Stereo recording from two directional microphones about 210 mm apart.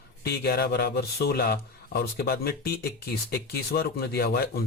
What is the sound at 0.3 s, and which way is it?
A man's voice, 50° left (ahead or behind).